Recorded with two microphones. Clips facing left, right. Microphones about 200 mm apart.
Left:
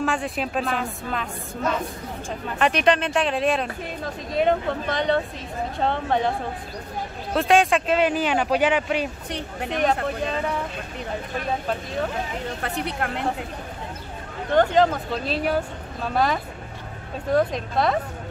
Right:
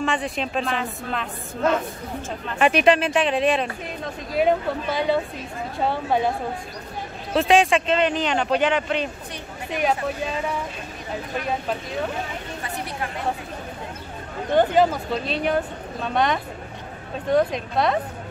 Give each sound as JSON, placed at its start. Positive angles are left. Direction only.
{"t": 0.0, "sound": "speech", "side_deg": 0}
{"t": 2.6, "sound": "speech", "side_deg": -5}
{"t": 7.3, "sound": "speech", "side_deg": 0}
{"t": 12.6, "sound": "a woman's voice", "side_deg": 65}
{"t": 14.5, "sound": "speech", "side_deg": -10}